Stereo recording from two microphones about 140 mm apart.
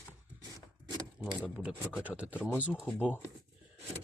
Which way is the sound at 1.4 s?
10° right (ahead or behind).